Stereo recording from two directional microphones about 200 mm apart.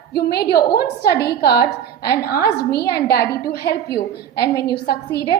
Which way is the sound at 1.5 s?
20° left (ahead or behind).